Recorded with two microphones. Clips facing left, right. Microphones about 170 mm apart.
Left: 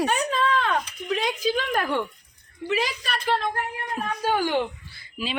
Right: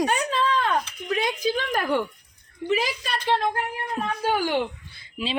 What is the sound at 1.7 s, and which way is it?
Speech, 5° right (ahead or behind).